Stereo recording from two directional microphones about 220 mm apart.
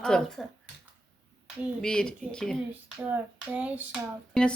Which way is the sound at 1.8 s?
5° left (ahead or behind).